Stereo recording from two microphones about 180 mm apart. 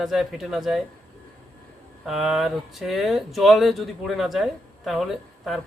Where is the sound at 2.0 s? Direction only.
Centre (ahead or behind).